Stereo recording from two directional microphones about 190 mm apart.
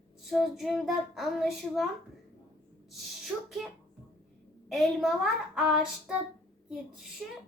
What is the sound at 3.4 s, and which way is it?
A child's voice, centre (ahead or behind).